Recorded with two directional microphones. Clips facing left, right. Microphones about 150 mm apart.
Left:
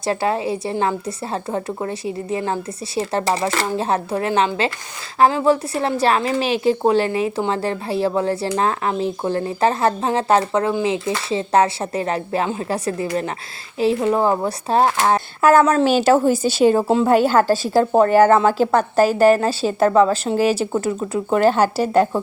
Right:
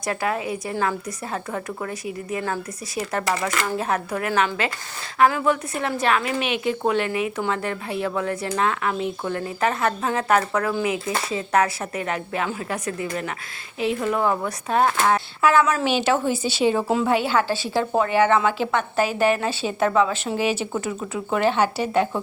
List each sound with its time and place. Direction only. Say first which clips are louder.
0.0 s a woman's voice: left 5 dB; 30° left (ahead or behind)